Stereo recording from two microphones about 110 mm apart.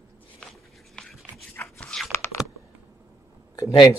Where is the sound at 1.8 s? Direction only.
5° left (ahead or behind).